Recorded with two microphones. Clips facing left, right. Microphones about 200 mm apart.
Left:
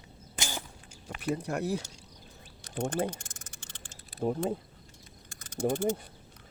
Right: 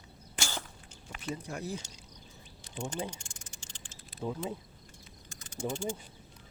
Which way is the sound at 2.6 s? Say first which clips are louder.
Left 6 dB; 55° left (ahead or behind).